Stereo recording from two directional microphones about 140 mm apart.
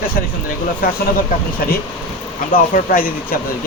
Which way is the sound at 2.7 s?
90° left.